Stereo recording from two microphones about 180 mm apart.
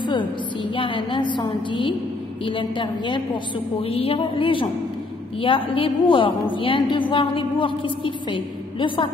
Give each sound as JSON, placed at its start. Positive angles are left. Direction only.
{"t": 0.0, "sound": "a woman's voice", "side_deg": 25}